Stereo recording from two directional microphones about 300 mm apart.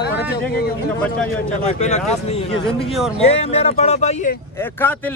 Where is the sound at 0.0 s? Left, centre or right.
Left.